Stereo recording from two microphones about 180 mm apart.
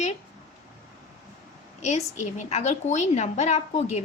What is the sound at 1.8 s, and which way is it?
A woman's voice, 40° left (ahead or behind).